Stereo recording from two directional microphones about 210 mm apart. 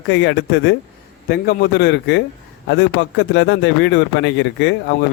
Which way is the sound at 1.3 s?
50° left (ahead or behind).